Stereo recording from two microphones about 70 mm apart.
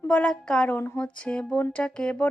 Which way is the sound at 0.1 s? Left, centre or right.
Centre.